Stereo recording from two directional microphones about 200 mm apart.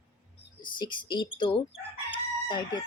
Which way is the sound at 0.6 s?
25° left (ahead or behind).